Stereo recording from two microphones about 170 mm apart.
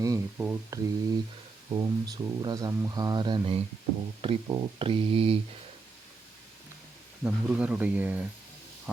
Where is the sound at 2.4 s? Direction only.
20° right (ahead or behind).